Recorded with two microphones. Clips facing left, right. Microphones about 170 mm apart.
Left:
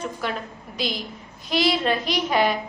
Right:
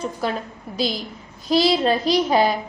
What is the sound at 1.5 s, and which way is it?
A child's voice, 35° right (ahead or behind).